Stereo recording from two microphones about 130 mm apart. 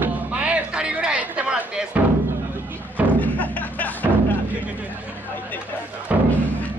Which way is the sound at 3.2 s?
10° left (ahead or behind).